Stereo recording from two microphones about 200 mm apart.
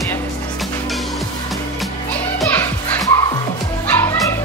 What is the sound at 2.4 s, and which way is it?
Music, 15° left (ahead or behind).